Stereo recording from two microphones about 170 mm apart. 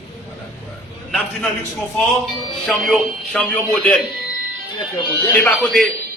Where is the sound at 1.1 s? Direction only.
5° left (ahead or behind).